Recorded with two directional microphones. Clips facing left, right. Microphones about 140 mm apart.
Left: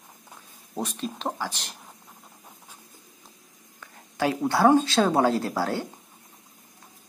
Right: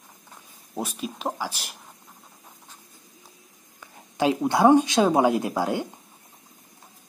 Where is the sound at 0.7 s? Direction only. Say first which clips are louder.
Even; 5° right (ahead or behind).